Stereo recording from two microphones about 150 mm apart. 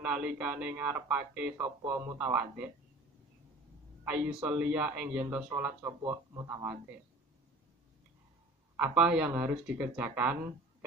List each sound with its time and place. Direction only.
0.0 s speech: 5° right (ahead or behind)
4.0 s speech: 5° right (ahead or behind)
8.7 s speech: 10° right (ahead or behind)